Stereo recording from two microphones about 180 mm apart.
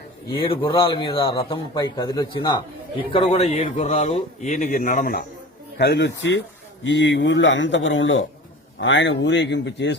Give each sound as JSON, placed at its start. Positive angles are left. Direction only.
{"t": 0.3, "sound": "a man's voice", "side_deg": 30}
{"t": 5.7, "sound": "a man's voice", "side_deg": 70}